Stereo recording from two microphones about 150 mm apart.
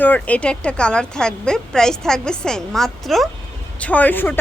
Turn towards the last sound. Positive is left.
turn(degrees=10)  # may be behind; listen again after turning